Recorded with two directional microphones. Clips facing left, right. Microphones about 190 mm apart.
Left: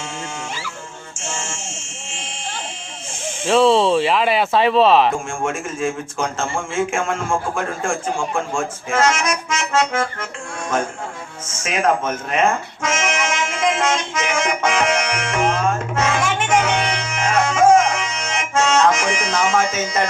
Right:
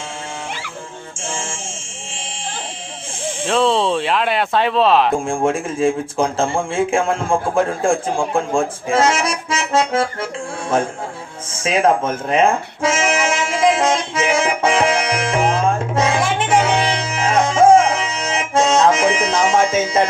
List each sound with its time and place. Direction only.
1.1 s music: 30° right (ahead or behind)
3.4 s speech: centre (ahead or behind)
5.1 s speech: 35° right (ahead or behind)
11.5 s music: 30° right (ahead or behind)